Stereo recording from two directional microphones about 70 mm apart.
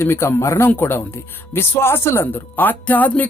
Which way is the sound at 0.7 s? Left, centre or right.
Left.